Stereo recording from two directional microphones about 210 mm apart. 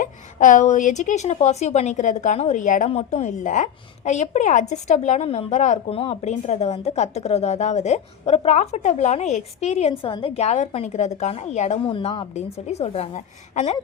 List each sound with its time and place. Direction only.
0.0 s a woman's voice: 40° left (ahead or behind)